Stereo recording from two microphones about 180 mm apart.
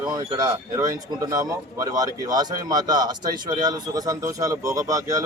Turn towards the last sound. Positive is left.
turn(degrees=-20)  # may be behind; listen again after turning